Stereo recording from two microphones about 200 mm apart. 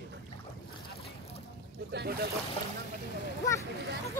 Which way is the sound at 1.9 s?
55° right (ahead or behind).